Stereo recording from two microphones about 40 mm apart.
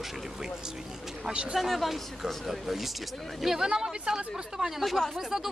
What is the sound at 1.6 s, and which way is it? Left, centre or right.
Speech, centre.